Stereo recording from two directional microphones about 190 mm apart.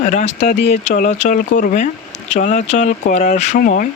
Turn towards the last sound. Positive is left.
turn(degrees=45)  # may be behind; listen again after turning